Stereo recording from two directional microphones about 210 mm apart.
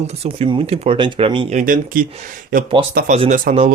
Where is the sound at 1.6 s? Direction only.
40° right (ahead or behind).